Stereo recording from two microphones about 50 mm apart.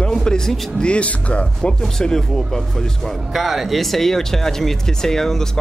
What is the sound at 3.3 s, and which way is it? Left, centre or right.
Speech, centre.